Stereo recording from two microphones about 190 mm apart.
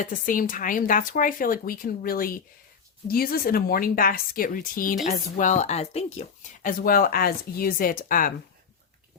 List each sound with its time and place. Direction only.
0.0 s speech: 45° left (ahead or behind)